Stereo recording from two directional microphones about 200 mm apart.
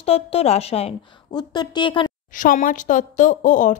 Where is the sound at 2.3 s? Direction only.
40° left (ahead or behind).